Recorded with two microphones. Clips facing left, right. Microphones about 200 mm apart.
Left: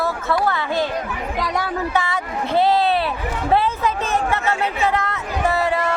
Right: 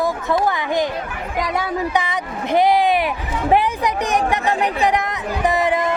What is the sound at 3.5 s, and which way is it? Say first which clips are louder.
A woman's voice: right 1 dB; 15° right (ahead or behind).